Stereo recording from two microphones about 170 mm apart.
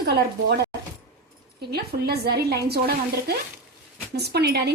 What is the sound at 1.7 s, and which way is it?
A woman's voice, 65° right (ahead or behind).